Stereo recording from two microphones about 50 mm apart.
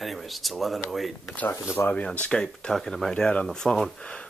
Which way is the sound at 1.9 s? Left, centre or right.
Left.